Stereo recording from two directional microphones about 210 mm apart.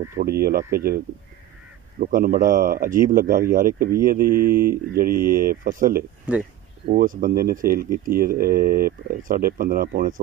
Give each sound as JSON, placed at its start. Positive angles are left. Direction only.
{"t": 0.2, "sound": "speech", "side_deg": -45}
{"t": 2.0, "sound": "a man's voice", "side_deg": -40}
{"t": 6.3, "sound": "speech", "side_deg": -5}
{"t": 6.9, "sound": "speech", "side_deg": -40}